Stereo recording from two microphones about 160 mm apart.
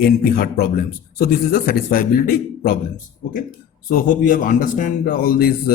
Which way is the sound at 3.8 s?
60° left (ahead or behind).